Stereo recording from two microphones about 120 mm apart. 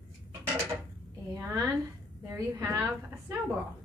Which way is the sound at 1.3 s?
30° right (ahead or behind).